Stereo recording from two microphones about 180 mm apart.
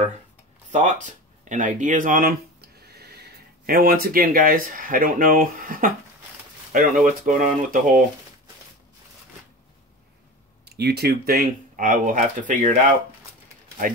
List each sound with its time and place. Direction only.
0.7 s speech: 45° right (ahead or behind)
2.9 s speech: 60° right (ahead or behind)
10.6 s speech: 65° right (ahead or behind); by 12.8 s 45° right (ahead or behind)